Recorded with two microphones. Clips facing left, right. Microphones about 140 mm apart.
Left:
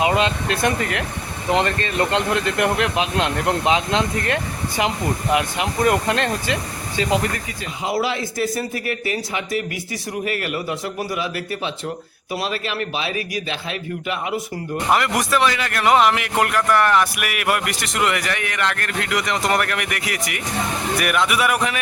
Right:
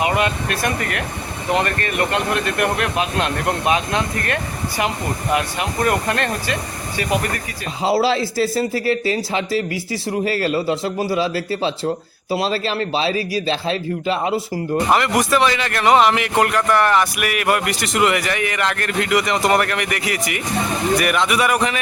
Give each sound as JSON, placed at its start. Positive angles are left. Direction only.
{"t": 0.0, "sound": "speech", "side_deg": 20}
{"t": 7.9, "sound": "speech", "side_deg": -30}
{"t": 14.8, "sound": "a man's voice", "side_deg": 0}